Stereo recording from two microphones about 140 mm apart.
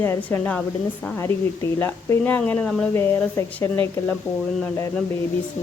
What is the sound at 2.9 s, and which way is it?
Speech, 20° left (ahead or behind).